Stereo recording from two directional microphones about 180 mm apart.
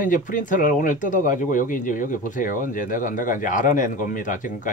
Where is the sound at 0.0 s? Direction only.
45° left (ahead or behind).